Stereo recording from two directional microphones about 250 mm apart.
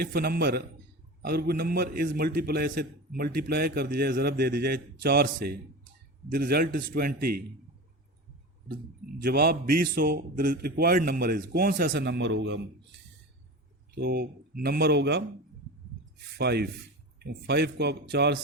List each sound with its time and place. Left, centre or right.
0.0 s a man's voice: right
8.6 s a man's voice: right
13.9 s a man's voice: right
16.4 s a man's voice: right